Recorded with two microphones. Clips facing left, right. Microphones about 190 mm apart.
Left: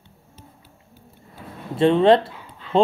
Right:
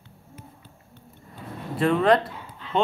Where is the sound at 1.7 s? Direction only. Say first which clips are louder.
Left 5 dB; 25° left (ahead or behind).